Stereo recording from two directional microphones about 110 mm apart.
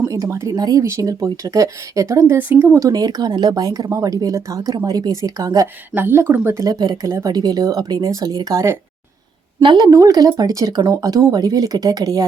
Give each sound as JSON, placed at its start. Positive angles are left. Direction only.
{"t": 0.0, "sound": "speech", "side_deg": -30}
{"t": 2.7, "sound": "speech", "side_deg": -35}
{"t": 5.9, "sound": "speech", "side_deg": -20}
{"t": 7.1, "sound": "speech", "side_deg": -25}
{"t": 7.3, "sound": "speech", "side_deg": -35}
{"t": 9.6, "sound": "a woman's voice", "side_deg": -40}
{"t": 9.9, "sound": "speech", "side_deg": -30}